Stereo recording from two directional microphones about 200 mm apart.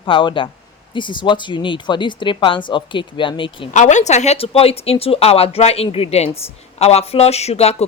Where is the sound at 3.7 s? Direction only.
35° left (ahead or behind).